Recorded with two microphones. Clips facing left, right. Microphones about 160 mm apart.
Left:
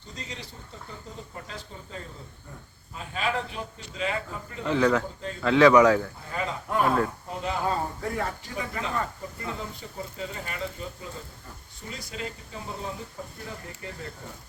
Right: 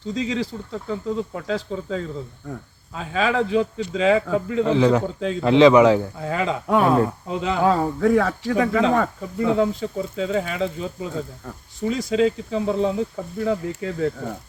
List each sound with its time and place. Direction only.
0.1 s speech: 90° right
4.7 s speech: 25° right (ahead or behind)
5.0 s speech: 90° right
5.4 s speech: 20° right (ahead or behind)
6.2 s speech: 90° right